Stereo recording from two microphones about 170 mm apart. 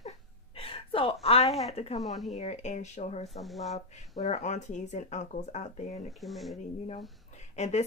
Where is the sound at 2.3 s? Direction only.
40° left (ahead or behind).